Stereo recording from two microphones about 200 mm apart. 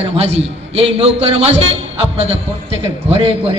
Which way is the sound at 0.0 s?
30° right (ahead or behind).